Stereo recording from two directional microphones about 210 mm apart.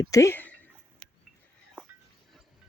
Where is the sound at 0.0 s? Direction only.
15° left (ahead or behind).